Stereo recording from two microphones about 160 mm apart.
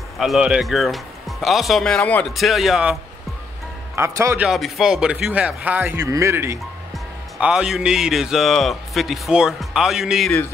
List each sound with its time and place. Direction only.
0.2 s a man's voice: 5° right (ahead or behind)
4.0 s speech: 15° right (ahead or behind)
4.4 s a man's voice: centre (ahead or behind)